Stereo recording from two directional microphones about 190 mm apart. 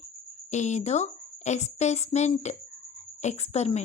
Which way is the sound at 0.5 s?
35° left (ahead or behind).